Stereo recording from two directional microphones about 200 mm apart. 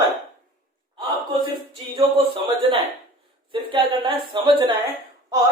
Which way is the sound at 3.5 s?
25° right (ahead or behind).